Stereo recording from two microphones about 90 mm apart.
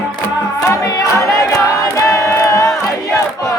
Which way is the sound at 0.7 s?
35° left (ahead or behind).